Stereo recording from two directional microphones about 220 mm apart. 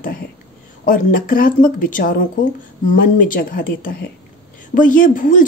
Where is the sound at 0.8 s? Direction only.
40° left (ahead or behind).